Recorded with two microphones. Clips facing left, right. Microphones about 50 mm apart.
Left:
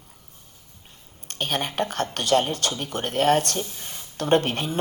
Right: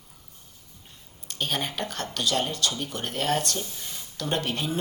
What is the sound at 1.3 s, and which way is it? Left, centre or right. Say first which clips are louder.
Speech: left 2 dB; left.